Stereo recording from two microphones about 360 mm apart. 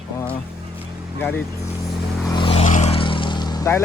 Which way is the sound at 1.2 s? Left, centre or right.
Centre.